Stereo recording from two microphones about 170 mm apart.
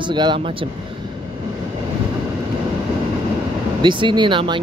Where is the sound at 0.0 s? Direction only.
25° right (ahead or behind).